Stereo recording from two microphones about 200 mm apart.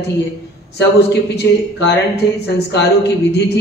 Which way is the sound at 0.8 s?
55° left (ahead or behind).